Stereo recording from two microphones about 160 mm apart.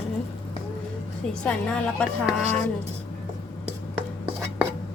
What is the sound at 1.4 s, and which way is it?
Speech, 5° left (ahead or behind).